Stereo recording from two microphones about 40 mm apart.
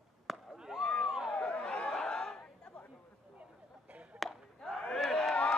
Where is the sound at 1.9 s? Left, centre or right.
Centre.